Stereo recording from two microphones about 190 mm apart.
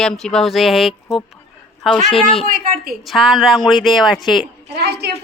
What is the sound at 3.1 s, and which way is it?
Speech, centre (ahead or behind).